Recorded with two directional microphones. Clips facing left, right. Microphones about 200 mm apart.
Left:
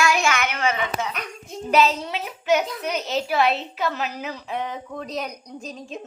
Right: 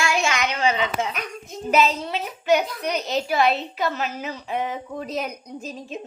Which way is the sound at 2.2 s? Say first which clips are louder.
Right 1 dB; centre (ahead or behind).